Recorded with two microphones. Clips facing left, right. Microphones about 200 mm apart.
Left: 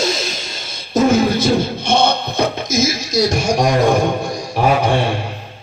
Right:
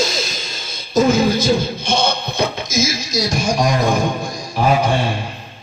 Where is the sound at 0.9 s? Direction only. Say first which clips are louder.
Left 1 dB; 65° left (ahead or behind).